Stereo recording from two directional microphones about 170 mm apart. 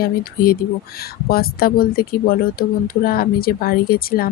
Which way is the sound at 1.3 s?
60° left (ahead or behind).